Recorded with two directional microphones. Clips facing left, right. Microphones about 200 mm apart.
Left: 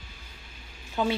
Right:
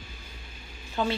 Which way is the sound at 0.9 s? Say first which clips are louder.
Left 1 dB; 10° left (ahead or behind).